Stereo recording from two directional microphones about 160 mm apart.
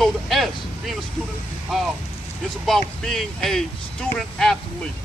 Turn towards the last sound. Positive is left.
turn(degrees=5)  # may be behind; listen again after turning